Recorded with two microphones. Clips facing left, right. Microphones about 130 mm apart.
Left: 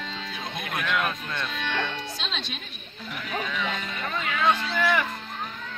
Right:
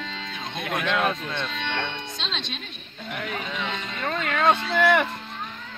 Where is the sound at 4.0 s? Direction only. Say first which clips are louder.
Right 4 dB; 65° right (ahead or behind).